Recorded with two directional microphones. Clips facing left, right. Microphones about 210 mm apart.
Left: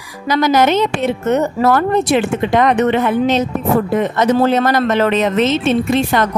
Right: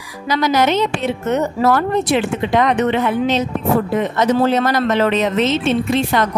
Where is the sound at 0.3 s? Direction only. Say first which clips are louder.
Left 3 dB; 50° left (ahead or behind).